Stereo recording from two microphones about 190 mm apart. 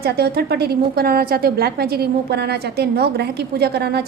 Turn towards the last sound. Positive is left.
turn(degrees=-60)  # may be behind; listen again after turning